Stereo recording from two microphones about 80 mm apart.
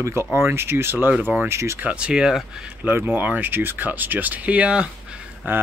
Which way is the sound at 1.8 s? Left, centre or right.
Centre.